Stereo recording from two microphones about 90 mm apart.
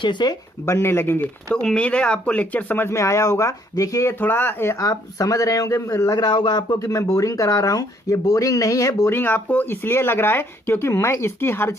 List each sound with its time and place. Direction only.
0.0 s speech: 55° left (ahead or behind)
0.6 s speech: 30° left (ahead or behind)
1.6 s speech: 10° left (ahead or behind)
2.9 s speech: 35° left (ahead or behind)
6.1 s speech: 60° left (ahead or behind)
6.7 s speech: 40° left (ahead or behind)
9.1 s speech: 20° left (ahead or behind)